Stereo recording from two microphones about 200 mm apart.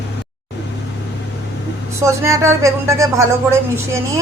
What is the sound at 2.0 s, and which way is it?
Speech, 15° right (ahead or behind).